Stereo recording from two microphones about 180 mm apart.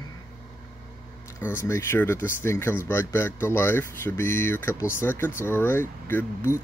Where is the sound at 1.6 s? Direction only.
15° left (ahead or behind).